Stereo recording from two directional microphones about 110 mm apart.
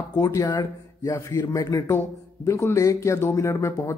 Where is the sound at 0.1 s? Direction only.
35° left (ahead or behind).